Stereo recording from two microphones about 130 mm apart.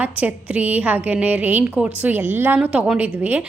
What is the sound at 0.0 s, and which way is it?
A woman's voice, 10° right (ahead or behind).